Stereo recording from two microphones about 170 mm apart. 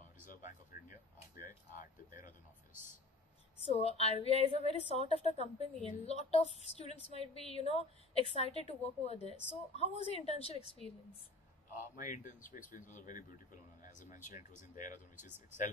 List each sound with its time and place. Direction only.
0.3 s speech: 50° left (ahead or behind)
2.7 s speech: 15° right (ahead or behind)
3.6 s a woman's voice: 35° left (ahead or behind)
12.0 s speech: 50° left (ahead or behind)